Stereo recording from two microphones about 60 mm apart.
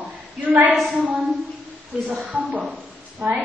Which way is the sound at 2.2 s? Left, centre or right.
Right.